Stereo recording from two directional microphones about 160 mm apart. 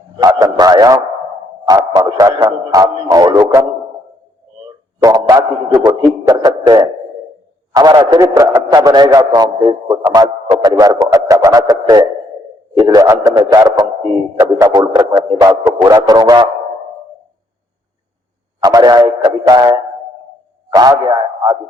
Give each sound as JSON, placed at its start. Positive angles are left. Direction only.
{"t": 0.2, "sound": "a man's voice", "side_deg": -25}
{"t": 5.0, "sound": "a man's voice", "side_deg": -20}
{"t": 18.6, "sound": "a man's voice", "side_deg": -25}